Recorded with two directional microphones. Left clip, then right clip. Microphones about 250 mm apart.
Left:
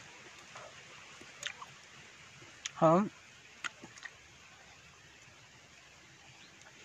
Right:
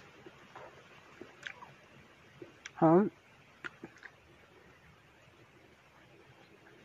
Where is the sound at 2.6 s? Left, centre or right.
Left.